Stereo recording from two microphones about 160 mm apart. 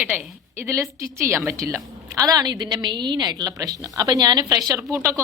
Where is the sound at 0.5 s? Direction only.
15° right (ahead or behind).